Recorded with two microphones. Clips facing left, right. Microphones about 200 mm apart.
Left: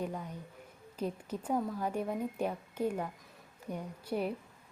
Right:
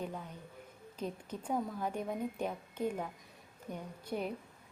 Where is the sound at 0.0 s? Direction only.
10° left (ahead or behind).